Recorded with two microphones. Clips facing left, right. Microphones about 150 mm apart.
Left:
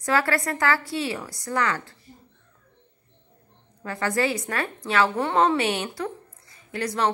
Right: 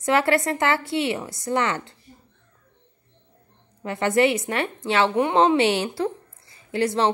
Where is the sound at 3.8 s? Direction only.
20° right (ahead or behind).